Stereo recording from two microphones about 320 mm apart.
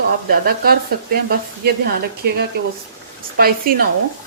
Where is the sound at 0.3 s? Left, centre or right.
Right.